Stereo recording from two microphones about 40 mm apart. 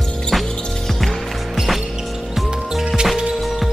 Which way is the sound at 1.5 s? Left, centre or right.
Centre.